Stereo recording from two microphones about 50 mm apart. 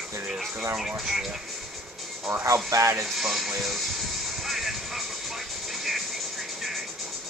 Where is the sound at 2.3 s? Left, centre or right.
Right.